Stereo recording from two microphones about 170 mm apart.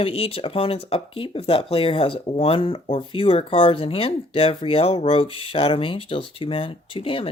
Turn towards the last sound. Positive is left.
turn(degrees=35)  # may be behind; listen again after turning